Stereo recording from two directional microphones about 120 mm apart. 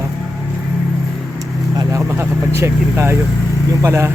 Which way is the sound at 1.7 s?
25° right (ahead or behind).